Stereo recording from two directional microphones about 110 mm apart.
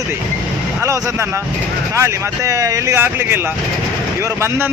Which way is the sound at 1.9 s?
25° right (ahead or behind).